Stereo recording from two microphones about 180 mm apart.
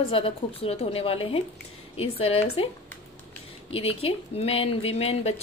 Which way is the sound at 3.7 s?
30° left (ahead or behind).